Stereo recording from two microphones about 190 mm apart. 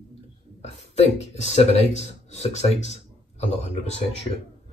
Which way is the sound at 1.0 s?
35° left (ahead or behind).